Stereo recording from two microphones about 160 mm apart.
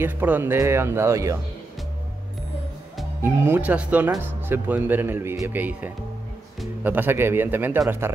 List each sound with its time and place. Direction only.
0.0 s a man's voice: 10° right (ahead or behind)
3.2 s a man's voice: 15° right (ahead or behind)